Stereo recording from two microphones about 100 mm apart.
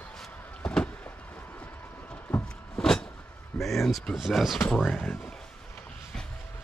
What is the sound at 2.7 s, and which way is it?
Vehicle, 5° left (ahead or behind).